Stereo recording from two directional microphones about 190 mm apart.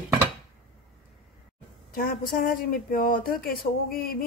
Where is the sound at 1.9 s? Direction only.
50° left (ahead or behind).